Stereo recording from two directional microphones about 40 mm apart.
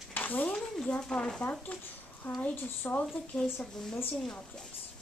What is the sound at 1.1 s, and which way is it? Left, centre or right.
Speech, centre.